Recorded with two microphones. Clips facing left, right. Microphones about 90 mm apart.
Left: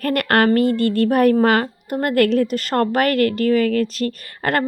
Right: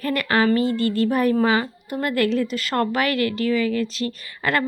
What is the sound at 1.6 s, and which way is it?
Speech, 45° left (ahead or behind).